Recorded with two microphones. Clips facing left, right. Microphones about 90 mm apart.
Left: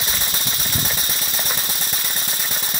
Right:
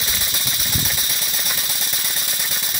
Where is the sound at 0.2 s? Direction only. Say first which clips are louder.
Left 1 dB; 35° left (ahead or behind).